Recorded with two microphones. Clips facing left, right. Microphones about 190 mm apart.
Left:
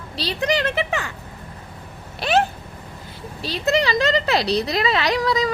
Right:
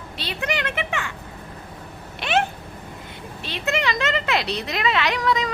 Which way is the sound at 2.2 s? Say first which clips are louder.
Left 3 dB; 40° left (ahead or behind).